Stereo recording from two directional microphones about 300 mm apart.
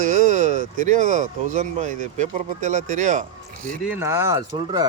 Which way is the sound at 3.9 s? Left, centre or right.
Centre.